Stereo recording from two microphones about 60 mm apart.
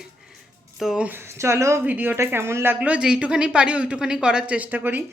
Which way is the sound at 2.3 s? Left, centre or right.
Right.